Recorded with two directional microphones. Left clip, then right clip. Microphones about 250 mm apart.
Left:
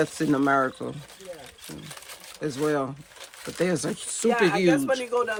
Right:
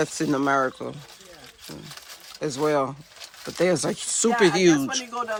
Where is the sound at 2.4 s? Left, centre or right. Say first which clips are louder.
Right 3 dB; centre.